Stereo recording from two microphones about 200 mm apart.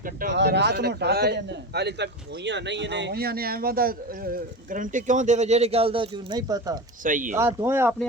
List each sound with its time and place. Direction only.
0.0 s a man's voice: 45° right (ahead or behind)
0.3 s a man's voice: 60° right (ahead or behind); by 6.7 s 20° right (ahead or behind)
7.0 s speech: 40° right (ahead or behind)
7.3 s speech: 10° right (ahead or behind)